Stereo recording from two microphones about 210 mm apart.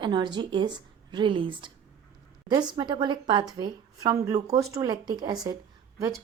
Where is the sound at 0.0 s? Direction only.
20° right (ahead or behind).